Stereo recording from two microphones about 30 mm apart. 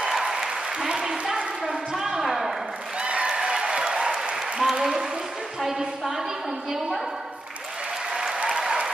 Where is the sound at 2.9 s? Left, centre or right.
Right.